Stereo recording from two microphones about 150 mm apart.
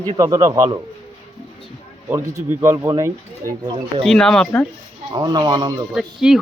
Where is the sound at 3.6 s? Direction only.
30° right (ahead or behind).